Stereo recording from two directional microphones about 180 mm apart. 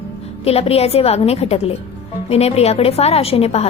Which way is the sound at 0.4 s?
35° left (ahead or behind).